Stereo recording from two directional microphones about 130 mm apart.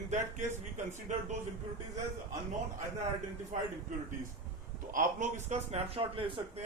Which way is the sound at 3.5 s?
70° right (ahead or behind).